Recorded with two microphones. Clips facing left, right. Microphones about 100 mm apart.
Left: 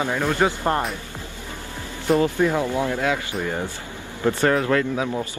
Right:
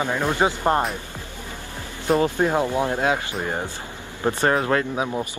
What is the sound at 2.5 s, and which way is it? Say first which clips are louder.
Speech: right 1 dB; 20° right (ahead or behind).